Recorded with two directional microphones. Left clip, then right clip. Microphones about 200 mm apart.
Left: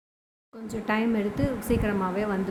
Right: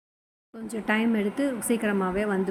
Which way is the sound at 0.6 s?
15° right (ahead or behind).